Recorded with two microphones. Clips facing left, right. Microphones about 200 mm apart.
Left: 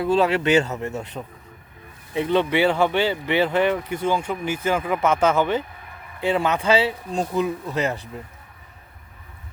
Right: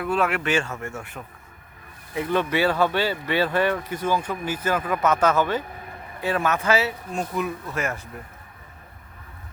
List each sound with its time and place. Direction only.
0.0 s speech: 25° left (ahead or behind)
4.7 s speech: 15° left (ahead or behind)
5.0 s speech: 25° left (ahead or behind)